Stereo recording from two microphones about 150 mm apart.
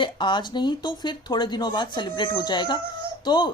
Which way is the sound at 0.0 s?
30° left (ahead or behind).